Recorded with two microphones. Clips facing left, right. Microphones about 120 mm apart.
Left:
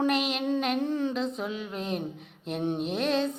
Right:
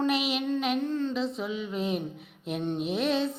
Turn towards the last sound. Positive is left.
turn(degrees=0)  # may be behind; listen again after turning